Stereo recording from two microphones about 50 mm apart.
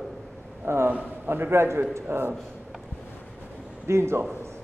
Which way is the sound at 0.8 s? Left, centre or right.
Right.